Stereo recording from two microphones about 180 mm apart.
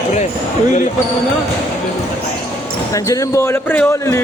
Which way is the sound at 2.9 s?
20° left (ahead or behind).